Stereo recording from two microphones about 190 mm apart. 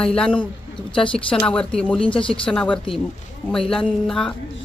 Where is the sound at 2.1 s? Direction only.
25° left (ahead or behind).